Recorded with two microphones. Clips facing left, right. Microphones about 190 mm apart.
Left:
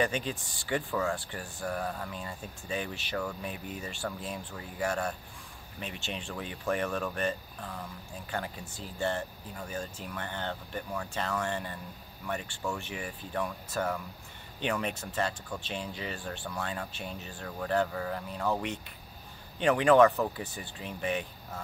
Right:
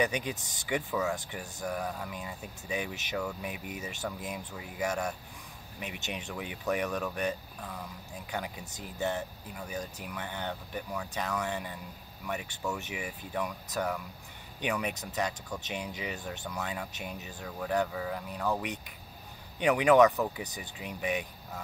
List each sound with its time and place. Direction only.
0.0 s speech: 15° right (ahead or behind); by 14.0 s centre (ahead or behind)
14.6 s speech: 10° right (ahead or behind)
19.6 s speech: 10° right (ahead or behind)